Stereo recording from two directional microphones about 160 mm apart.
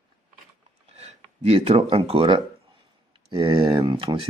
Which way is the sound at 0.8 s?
45° right (ahead or behind).